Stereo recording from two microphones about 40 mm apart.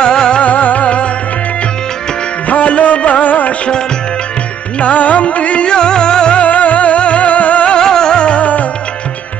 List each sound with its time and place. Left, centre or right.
0.0 s music: centre
0.4 s music: left
2.4 s music: left
4.7 s music: left
6.4 s music: left
7.7 s music: centre